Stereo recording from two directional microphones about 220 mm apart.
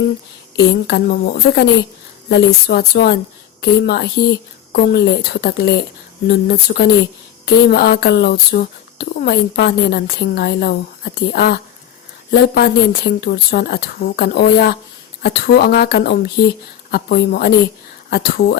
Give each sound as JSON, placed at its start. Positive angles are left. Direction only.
{"t": 0.5, "sound": "speech", "side_deg": 50}